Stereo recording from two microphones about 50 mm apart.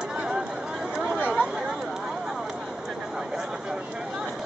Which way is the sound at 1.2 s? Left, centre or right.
Right.